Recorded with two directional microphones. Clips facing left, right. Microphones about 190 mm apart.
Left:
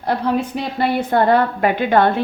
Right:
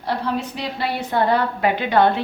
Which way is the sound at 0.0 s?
50° left (ahead or behind).